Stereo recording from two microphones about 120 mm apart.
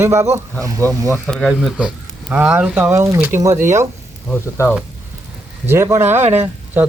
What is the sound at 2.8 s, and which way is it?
Speech, 25° right (ahead or behind).